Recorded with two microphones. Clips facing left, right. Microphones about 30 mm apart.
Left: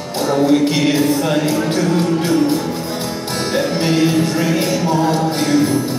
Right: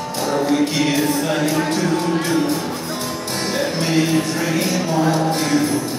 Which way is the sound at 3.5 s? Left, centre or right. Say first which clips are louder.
Left 4 dB; centre.